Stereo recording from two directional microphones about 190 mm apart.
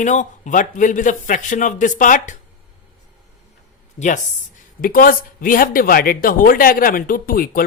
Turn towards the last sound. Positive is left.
turn(degrees=50)  # may be behind; listen again after turning